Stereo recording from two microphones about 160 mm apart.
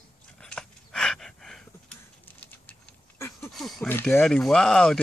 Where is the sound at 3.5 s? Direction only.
Centre (ahead or behind).